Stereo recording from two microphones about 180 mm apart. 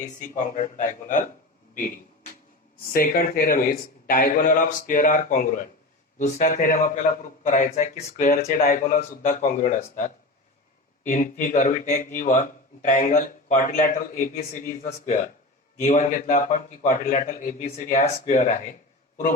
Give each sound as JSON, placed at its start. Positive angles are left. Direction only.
{"t": 0.0, "sound": "a man's voice", "side_deg": 45}
{"t": 11.0, "sound": "a man's voice", "side_deg": 45}